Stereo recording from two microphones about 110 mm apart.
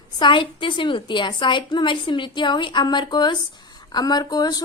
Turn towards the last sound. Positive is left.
turn(degrees=35)  # may be behind; listen again after turning